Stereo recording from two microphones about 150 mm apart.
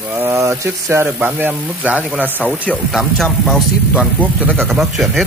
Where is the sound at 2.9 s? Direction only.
Centre (ahead or behind).